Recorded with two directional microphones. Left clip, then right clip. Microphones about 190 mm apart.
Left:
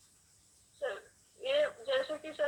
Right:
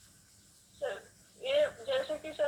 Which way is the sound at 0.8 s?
30° left (ahead or behind).